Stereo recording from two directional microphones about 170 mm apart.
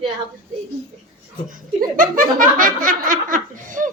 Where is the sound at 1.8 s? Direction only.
55° right (ahead or behind).